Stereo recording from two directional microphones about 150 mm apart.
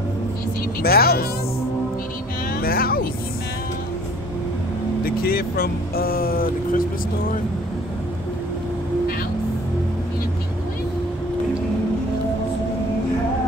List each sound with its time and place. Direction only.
0.8 s speech: 90° left
2.6 s a sound: 80° left
5.0 s speech: 85° left